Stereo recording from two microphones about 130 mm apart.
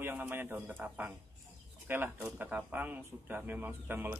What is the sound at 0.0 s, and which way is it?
Speech, 15° right (ahead or behind).